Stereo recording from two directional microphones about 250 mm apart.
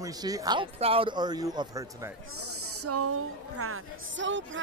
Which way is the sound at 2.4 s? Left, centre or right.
Right.